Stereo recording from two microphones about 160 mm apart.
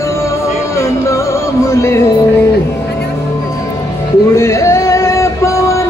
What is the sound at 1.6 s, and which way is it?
Music, 15° left (ahead or behind).